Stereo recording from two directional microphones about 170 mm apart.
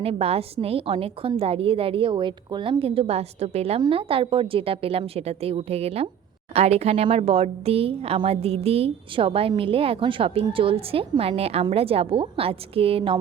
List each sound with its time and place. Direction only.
0.0 s speech: 35° right (ahead or behind)